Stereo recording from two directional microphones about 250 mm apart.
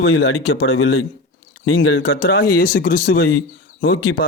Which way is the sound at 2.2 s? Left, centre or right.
Left.